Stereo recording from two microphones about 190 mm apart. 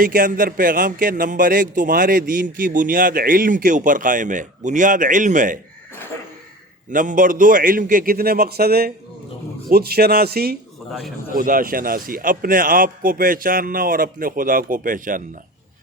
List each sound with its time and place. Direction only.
0.0 s speech: 45° right (ahead or behind)
6.9 s speech: 45° right (ahead or behind)